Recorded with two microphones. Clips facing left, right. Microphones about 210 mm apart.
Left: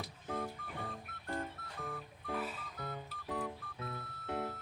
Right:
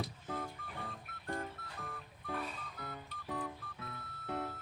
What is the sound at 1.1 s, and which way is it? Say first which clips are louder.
Music: right 2 dB; centre (ahead or behind).